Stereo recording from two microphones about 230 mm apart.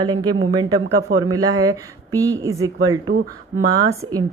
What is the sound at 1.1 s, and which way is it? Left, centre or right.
Speech, right.